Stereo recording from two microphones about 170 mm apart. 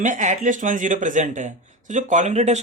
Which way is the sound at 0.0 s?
50° right (ahead or behind).